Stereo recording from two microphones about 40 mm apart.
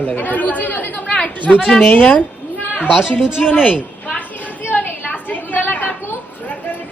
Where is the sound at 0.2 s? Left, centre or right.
Left.